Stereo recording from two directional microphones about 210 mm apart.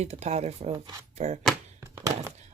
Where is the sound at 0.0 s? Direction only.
30° right (ahead or behind).